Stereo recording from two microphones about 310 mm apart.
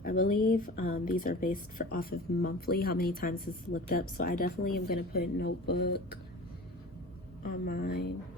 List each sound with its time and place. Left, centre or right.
0.0 s speech: left
7.4 s speech: left